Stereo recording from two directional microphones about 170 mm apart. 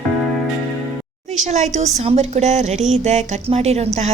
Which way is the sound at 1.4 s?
40° right (ahead or behind).